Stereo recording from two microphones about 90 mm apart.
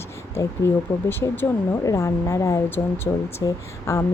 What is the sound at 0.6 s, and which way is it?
Speech, 25° left (ahead or behind).